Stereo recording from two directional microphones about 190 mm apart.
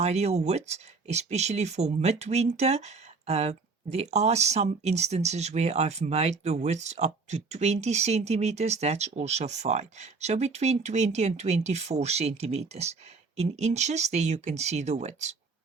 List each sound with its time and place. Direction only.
0.0 s speech: 35° right (ahead or behind)